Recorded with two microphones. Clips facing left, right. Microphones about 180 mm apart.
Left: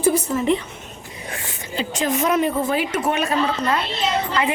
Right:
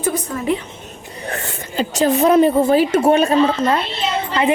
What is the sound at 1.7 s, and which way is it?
A woman's voice, 40° right (ahead or behind).